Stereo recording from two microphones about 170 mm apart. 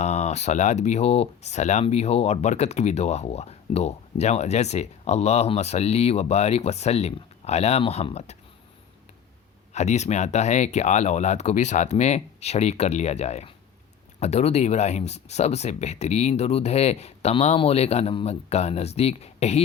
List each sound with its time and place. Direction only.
0.0 s speech: 40° left (ahead or behind)
9.7 s speech: 40° left (ahead or behind)